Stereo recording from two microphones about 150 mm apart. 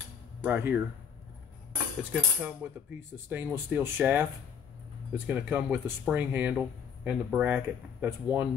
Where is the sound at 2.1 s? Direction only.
10° right (ahead or behind).